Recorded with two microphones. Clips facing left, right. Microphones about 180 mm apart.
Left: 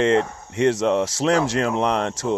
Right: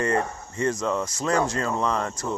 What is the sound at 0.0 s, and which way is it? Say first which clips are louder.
Speech: left 6 dB; 85° left.